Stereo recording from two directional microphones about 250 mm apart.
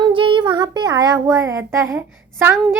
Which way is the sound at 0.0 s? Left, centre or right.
Centre.